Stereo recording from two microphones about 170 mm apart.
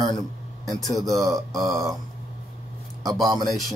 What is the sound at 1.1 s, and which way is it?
Speech, 20° right (ahead or behind).